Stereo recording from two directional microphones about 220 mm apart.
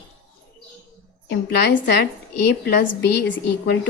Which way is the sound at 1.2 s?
50° left (ahead or behind).